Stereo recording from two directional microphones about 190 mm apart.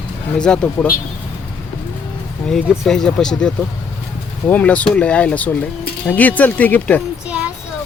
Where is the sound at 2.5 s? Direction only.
5° left (ahead or behind).